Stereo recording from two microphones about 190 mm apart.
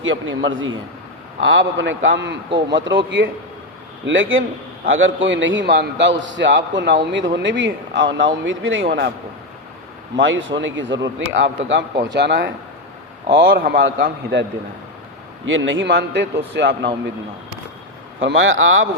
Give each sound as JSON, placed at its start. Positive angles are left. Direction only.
{"t": 0.0, "sound": "a man's voice", "side_deg": -90}
{"t": 2.5, "sound": "speech", "side_deg": -25}
{"t": 2.7, "sound": "a man's voice", "side_deg": -75}
{"t": 4.0, "sound": "a man's voice", "side_deg": -85}
{"t": 8.9, "sound": "a man's voice", "side_deg": -55}
{"t": 10.2, "sound": "a man's voice", "side_deg": -80}
{"t": 12.0, "sound": "a man's voice", "side_deg": -65}
{"t": 15.4, "sound": "a man's voice", "side_deg": -85}
{"t": 18.2, "sound": "a man's voice", "side_deg": -90}